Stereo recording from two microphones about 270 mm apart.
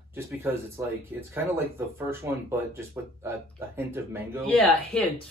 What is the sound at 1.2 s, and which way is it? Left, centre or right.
Speech, centre.